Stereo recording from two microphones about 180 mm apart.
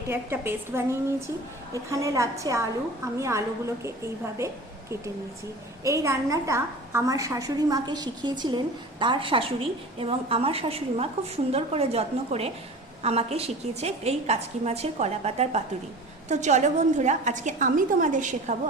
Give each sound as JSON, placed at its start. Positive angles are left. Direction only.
{"t": 0.1, "sound": "a woman's voice", "side_deg": -10}